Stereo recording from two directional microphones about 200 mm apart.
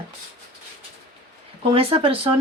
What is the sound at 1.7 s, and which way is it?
Speech, 25° right (ahead or behind).